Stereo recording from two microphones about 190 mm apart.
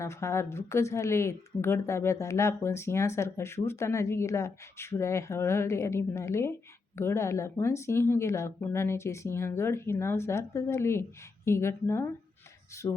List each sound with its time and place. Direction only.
0.0 s speech: 15° left (ahead or behind)